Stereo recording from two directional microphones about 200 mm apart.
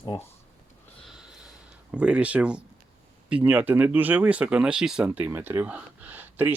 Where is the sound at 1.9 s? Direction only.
5° right (ahead or behind).